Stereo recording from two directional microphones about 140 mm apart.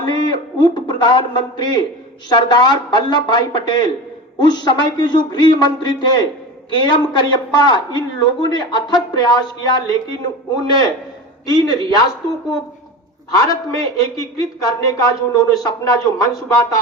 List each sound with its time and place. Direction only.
0.0 s a sound: 30° left (ahead or behind)
2.3 s speech: 30° left (ahead or behind)
11.4 s a man's voice: 30° left (ahead or behind)
13.3 s a man's voice: 25° left (ahead or behind)